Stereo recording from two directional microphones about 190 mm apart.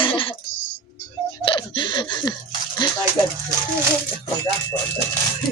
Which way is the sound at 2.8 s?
25° left (ahead or behind).